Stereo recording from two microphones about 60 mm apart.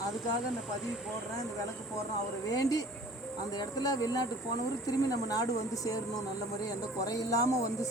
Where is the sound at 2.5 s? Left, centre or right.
Left.